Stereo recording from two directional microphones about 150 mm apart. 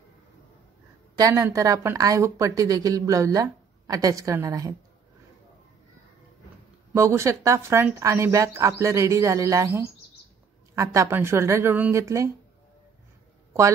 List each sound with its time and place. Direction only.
1.1 s a woman's voice: 25° right (ahead or behind)
6.9 s a woman's voice: 20° right (ahead or behind)